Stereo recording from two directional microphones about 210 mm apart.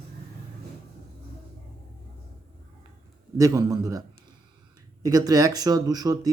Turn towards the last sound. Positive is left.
turn(degrees=-15)  # may be behind; listen again after turning